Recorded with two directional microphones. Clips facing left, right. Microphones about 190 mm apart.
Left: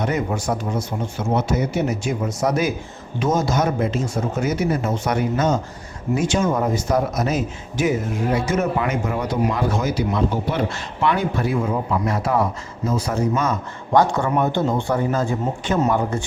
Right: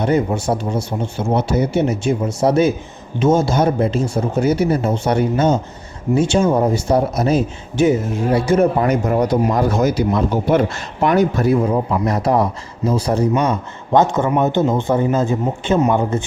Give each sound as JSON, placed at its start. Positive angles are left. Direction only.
{"t": 0.0, "sound": "speech", "side_deg": -30}
{"t": 13.9, "sound": "speech", "side_deg": -20}